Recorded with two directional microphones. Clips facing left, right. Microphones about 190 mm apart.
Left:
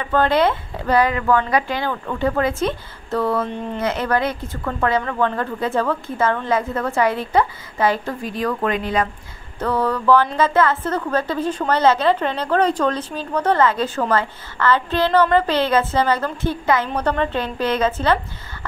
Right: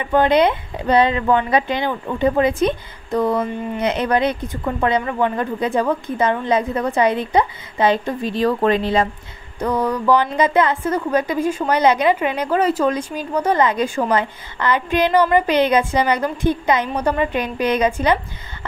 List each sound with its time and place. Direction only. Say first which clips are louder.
0.0 s a woman's voice: right 2 dB; 15° right (ahead or behind)
3.8 s a woman's voice: right 3 dB; 20° right (ahead or behind)
9.6 s a woman's voice: right 1 dB; 15° right (ahead or behind)